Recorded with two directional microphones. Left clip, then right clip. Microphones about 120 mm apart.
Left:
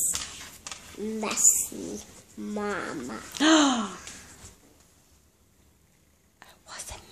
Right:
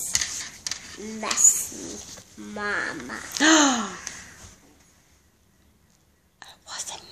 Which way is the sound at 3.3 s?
5° left (ahead or behind).